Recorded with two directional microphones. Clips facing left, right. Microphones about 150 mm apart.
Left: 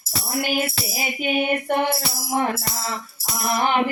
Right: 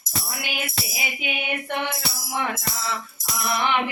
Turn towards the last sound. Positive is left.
turn(degrees=40)  # may be behind; listen again after turning